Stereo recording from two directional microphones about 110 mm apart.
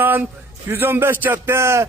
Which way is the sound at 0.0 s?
15° right (ahead or behind).